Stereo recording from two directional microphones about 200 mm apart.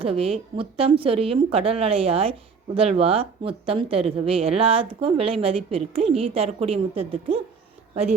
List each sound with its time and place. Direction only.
0.0 s speech: 30° right (ahead or behind)